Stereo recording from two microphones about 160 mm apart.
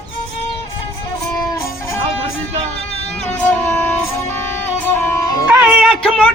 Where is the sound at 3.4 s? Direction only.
10° left (ahead or behind).